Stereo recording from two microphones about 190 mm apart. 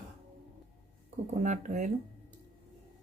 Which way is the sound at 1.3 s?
40° right (ahead or behind).